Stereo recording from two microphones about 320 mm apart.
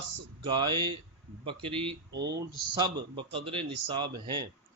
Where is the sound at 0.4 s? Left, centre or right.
Centre.